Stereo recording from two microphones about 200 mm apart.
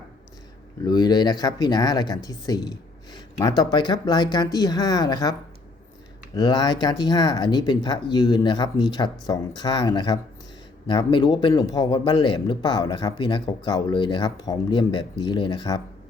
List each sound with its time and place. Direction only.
0.9 s speech: 20° left (ahead or behind)
6.3 s speech: 20° left (ahead or behind)